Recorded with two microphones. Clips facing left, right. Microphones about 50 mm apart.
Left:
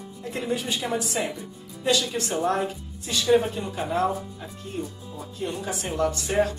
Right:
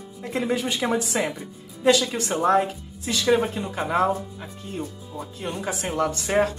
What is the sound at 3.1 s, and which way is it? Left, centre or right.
Speech, right.